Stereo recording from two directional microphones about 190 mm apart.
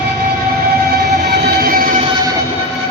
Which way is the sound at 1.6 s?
50° right (ahead or behind).